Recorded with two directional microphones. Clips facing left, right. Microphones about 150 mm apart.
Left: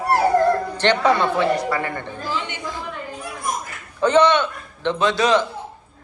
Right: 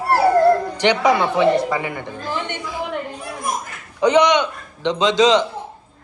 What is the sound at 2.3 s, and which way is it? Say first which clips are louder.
Speech: right 2 dB; 55° right (ahead or behind).